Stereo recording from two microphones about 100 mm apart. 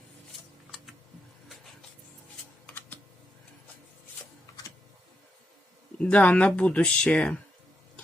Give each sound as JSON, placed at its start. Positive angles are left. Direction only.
{"t": 2.6, "sound": "computer keyboard", "side_deg": 20}
{"t": 6.0, "sound": "speech", "side_deg": 10}